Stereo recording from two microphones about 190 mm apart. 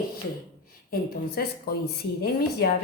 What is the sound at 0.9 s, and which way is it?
A woman's voice, 55° left (ahead or behind).